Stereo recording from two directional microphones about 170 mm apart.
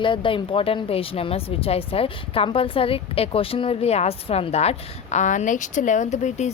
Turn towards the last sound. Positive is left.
turn(degrees=45)  # may be behind; listen again after turning